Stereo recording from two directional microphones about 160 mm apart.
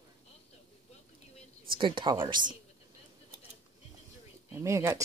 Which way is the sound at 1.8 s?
30° right (ahead or behind).